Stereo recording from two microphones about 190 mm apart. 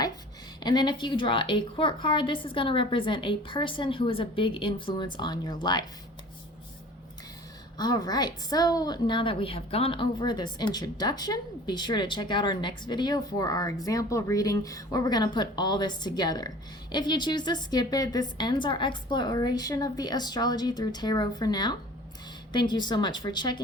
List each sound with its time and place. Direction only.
0.6 s a woman's voice: 25° left (ahead or behind)
7.8 s a woman's voice: 20° left (ahead or behind)